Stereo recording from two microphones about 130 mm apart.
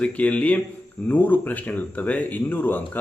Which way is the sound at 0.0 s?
10° left (ahead or behind).